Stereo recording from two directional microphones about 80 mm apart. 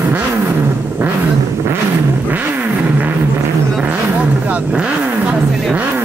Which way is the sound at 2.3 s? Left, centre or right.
Right.